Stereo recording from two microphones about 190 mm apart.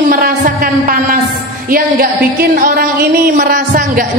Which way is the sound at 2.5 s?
50° right (ahead or behind).